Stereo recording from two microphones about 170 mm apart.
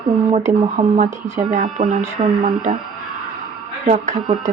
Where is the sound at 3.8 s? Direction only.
45° right (ahead or behind).